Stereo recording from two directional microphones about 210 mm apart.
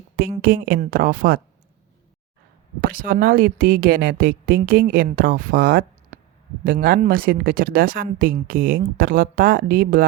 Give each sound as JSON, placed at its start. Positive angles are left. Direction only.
{"t": 0.2, "sound": "speech", "side_deg": -45}
{"t": 2.8, "sound": "speech", "side_deg": -40}